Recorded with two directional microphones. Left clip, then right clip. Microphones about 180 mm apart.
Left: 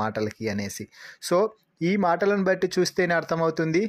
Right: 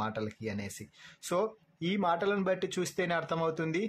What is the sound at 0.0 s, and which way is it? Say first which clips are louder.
Speech: left 8 dB; 40° left (ahead or behind).